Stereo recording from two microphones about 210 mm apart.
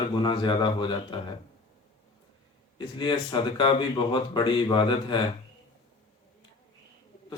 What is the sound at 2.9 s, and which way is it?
Speech, 20° left (ahead or behind).